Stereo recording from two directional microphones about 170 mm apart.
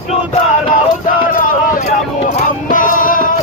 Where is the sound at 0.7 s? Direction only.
55° left (ahead or behind).